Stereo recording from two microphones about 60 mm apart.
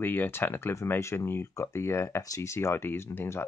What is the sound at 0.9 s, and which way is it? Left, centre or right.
Speech, left.